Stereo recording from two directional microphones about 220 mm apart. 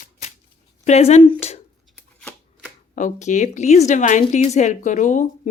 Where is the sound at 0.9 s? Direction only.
30° left (ahead or behind).